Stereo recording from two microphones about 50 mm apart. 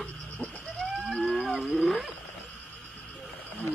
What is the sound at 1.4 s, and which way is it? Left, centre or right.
Wild animals, centre.